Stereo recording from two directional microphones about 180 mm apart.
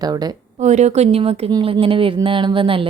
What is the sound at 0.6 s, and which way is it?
A woman's voice, 40° right (ahead or behind).